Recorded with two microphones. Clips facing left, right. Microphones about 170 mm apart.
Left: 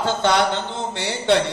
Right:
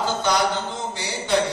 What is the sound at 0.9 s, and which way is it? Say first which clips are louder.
Speech: left 5 dB; 65° left (ahead or behind).